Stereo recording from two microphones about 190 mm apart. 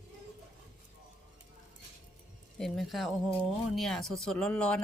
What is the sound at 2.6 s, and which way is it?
Speech, centre (ahead or behind).